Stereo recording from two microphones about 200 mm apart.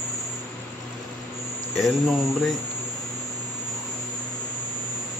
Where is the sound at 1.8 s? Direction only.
Centre (ahead or behind).